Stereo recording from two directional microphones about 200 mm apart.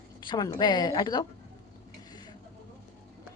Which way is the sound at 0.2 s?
20° left (ahead or behind).